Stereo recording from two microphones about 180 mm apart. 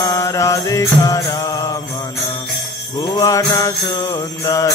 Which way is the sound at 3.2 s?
20° left (ahead or behind).